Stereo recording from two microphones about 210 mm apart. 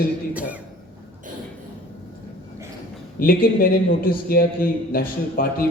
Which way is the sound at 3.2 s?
45° left (ahead or behind).